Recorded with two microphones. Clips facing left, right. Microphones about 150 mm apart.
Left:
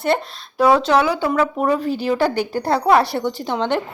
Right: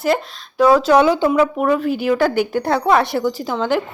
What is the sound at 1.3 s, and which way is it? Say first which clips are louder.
Speech: right 3 dB; 5° right (ahead or behind).